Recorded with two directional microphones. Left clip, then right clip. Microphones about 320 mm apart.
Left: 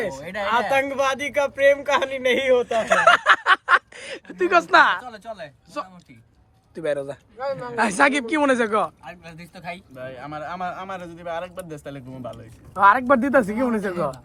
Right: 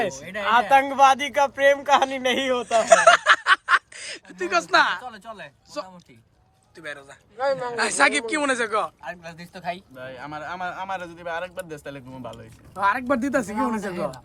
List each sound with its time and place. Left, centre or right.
0.2 s speech: centre
0.7 s speech: centre
6.7 s speech: centre
7.3 s speech: right
7.8 s speech: centre
9.0 s speech: centre
10.0 s speech: centre